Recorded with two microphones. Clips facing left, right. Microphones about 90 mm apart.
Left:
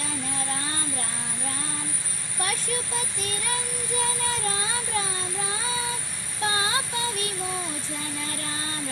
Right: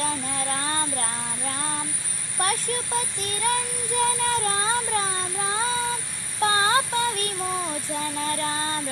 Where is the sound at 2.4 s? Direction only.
45° right (ahead or behind).